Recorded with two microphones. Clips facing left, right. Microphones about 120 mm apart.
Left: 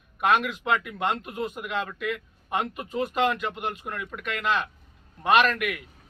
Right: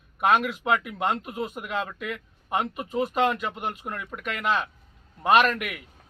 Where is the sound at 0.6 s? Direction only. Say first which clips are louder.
Right 1 dB; 20° right (ahead or behind).